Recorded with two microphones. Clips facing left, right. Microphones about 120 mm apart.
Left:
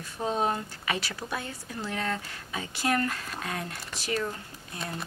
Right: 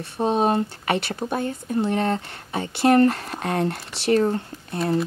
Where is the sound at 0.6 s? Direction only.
60° right (ahead or behind).